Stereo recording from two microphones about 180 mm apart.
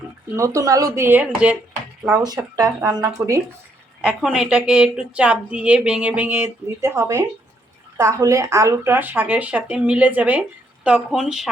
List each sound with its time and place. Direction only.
0.3 s speech: 15° right (ahead or behind)
4.0 s speech: 5° right (ahead or behind)